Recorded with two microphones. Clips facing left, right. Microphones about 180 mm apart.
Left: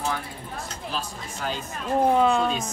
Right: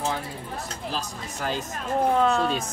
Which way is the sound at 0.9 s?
40° right (ahead or behind).